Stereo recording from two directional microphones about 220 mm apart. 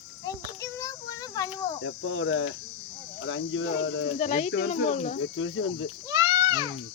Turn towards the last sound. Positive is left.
turn(degrees=-15)  # may be behind; listen again after turning